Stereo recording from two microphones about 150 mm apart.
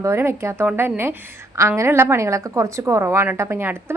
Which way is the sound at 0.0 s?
15° right (ahead or behind).